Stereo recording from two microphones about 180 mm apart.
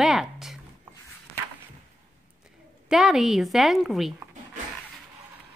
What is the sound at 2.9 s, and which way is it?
A woman's voice, 5° right (ahead or behind).